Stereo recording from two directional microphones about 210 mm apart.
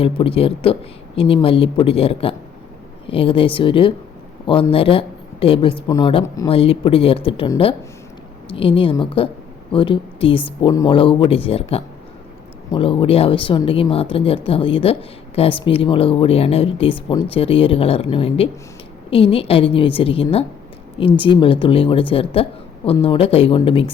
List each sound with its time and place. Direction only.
0.0 s speech: 25° left (ahead or behind)
12.7 s speech: 25° left (ahead or behind)